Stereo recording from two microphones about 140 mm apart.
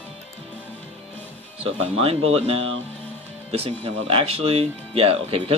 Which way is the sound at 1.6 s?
45° right (ahead or behind).